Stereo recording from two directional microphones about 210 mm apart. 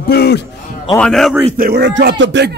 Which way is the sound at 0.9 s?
Centre (ahead or behind).